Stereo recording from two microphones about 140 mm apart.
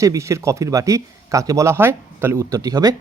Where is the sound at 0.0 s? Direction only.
20° right (ahead or behind).